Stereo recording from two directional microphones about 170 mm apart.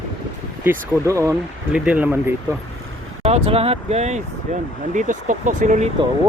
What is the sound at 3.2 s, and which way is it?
Speech, 35° right (ahead or behind).